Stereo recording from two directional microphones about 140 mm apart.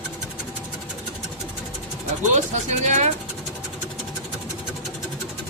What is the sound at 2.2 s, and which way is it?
Speech, 55° right (ahead or behind).